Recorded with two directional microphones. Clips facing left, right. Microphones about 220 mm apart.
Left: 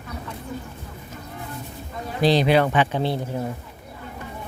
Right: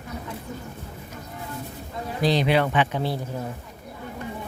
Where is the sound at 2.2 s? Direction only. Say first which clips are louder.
Left 3 dB; 35° left (ahead or behind).